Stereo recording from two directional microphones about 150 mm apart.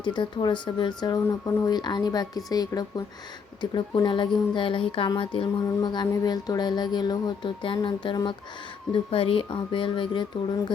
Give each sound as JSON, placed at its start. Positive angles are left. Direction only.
{"t": 0.0, "sound": "speech", "side_deg": 30}